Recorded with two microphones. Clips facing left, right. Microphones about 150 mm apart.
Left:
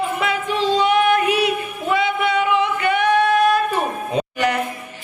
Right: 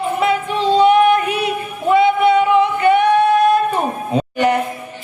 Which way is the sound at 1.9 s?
30° right (ahead or behind).